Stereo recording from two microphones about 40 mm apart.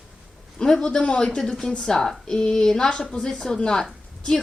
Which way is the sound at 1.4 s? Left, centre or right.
Centre.